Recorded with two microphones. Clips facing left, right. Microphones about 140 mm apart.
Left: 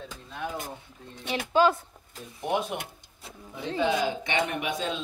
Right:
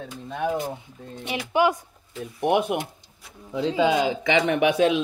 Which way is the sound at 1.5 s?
15° right (ahead or behind).